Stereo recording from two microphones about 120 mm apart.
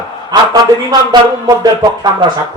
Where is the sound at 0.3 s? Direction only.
35° right (ahead or behind).